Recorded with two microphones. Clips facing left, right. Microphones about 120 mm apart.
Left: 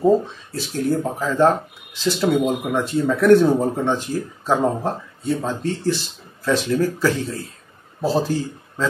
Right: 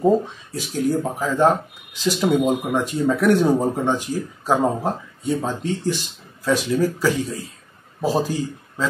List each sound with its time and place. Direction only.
0.6 s speech: 15° right (ahead or behind)